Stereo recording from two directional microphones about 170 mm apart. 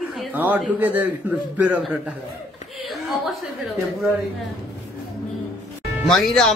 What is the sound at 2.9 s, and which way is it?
Speech, centre (ahead or behind).